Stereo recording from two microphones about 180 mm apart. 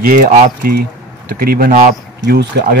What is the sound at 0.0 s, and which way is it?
Speech, 50° right (ahead or behind).